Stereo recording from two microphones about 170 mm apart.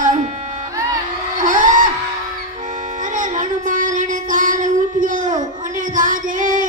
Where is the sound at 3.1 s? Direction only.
50° right (ahead or behind).